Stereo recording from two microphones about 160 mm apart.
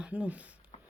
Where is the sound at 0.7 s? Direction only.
45° left (ahead or behind).